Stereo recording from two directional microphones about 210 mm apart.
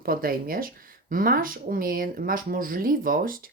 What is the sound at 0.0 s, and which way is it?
Speech, 45° right (ahead or behind).